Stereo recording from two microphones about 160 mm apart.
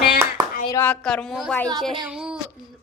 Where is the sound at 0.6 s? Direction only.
15° left (ahead or behind); by 2.4 s 5° right (ahead or behind).